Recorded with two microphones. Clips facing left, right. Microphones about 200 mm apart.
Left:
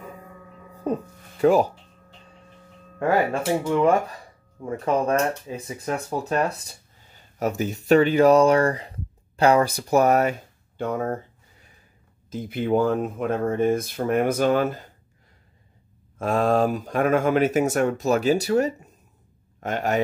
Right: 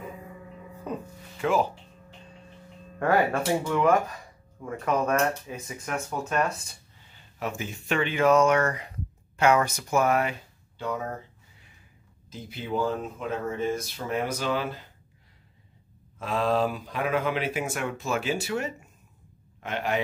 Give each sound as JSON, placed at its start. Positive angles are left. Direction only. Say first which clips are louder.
{"t": 0.9, "sound": "speech", "louder": "left 8 dB", "side_deg": 40}
{"t": 3.0, "sound": "speech", "louder": "left 2 dB", "side_deg": 25}
{"t": 10.8, "sound": "speech", "louder": "left 6 dB", "side_deg": 50}
{"t": 12.3, "sound": "speech", "louder": "left 10 dB", "side_deg": 50}
{"t": 16.2, "sound": "speech", "louder": "left 5 dB", "side_deg": 50}